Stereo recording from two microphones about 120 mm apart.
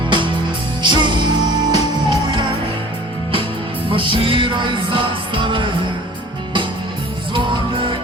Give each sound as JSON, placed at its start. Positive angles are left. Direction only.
{"t": 0.1, "sound": "music", "side_deg": -45}
{"t": 3.8, "sound": "music", "side_deg": -45}
{"t": 7.3, "sound": "music", "side_deg": -45}